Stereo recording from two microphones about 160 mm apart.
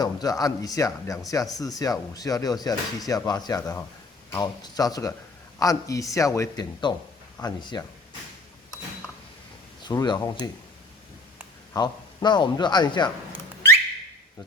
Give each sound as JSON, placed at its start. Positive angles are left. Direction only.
{"t": 0.0, "sound": "speech", "side_deg": 25}
{"t": 9.8, "sound": "speech", "side_deg": 25}
{"t": 11.7, "sound": "speech", "side_deg": 25}